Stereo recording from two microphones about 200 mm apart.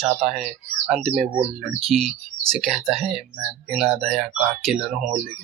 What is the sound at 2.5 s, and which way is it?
Speech, centre (ahead or behind).